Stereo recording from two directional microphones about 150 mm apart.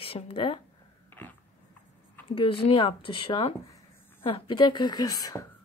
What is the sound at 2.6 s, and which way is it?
A woman's voice, 35° left (ahead or behind).